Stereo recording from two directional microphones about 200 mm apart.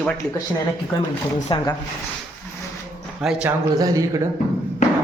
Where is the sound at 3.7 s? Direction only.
20° right (ahead or behind).